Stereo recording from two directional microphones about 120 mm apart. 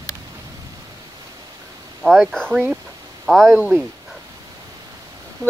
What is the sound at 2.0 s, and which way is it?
Speech, centre (ahead or behind).